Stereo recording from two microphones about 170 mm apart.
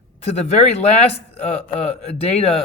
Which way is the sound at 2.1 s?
40° left (ahead or behind).